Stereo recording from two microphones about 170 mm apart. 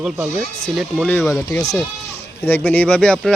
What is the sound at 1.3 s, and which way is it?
Speech, 20° left (ahead or behind).